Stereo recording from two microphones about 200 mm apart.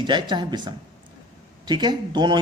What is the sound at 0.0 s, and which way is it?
A man's voice, 25° right (ahead or behind).